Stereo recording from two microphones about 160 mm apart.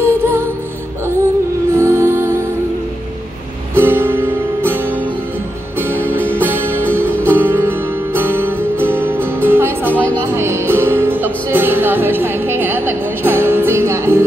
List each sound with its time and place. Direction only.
0.0 s music: 15° right (ahead or behind)
1.8 s music: 15° right (ahead or behind)
3.7 s music: 15° right (ahead or behind)
6.0 s music: 15° right (ahead or behind)